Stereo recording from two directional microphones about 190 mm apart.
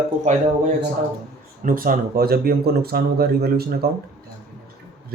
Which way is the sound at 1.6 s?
45° right (ahead or behind).